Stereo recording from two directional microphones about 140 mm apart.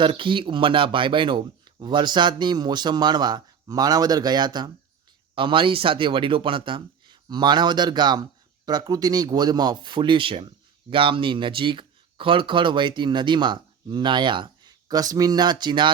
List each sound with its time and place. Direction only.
0.0 s speech: 35° right (ahead or behind)